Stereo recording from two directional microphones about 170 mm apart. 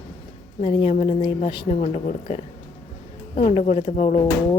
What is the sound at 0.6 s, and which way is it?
Speech, 35° left (ahead or behind).